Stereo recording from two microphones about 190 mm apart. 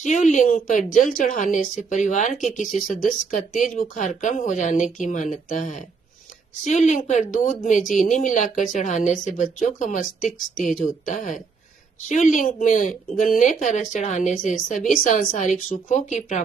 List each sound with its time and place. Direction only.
0.0 s a woman's voice: 40° left (ahead or behind)